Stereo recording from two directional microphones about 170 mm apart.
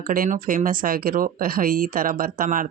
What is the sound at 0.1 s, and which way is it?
Speech, 55° right (ahead or behind).